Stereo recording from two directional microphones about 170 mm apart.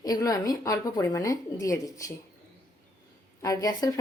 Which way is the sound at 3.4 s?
20° left (ahead or behind).